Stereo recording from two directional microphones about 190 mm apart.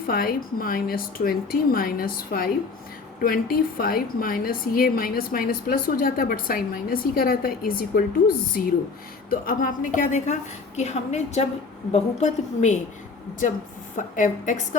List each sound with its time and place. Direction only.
0.1 s a woman's voice: 50° left (ahead or behind)
13.9 s a woman's voice: 40° left (ahead or behind)